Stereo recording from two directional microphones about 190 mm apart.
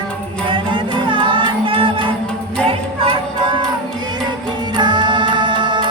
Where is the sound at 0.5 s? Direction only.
25° right (ahead or behind).